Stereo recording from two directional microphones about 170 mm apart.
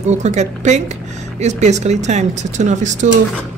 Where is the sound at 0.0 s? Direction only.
40° right (ahead or behind).